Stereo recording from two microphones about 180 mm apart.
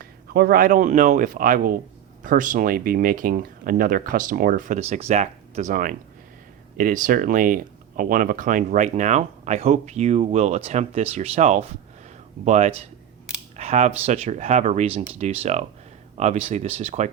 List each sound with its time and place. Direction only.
0.0 s speech: 60° right (ahead or behind); by 17.1 s 35° right (ahead or behind)